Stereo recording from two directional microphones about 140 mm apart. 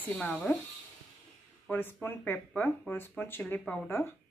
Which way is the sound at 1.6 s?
15° left (ahead or behind).